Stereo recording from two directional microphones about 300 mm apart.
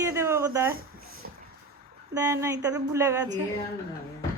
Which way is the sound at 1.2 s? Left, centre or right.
Right.